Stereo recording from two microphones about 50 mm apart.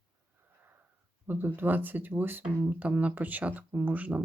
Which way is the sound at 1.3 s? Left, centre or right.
Right.